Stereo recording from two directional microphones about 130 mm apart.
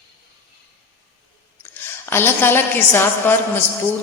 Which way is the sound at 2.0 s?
15° left (ahead or behind).